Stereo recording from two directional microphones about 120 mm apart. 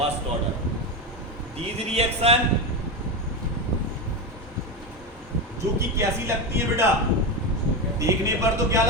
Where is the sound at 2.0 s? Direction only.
60° right (ahead or behind).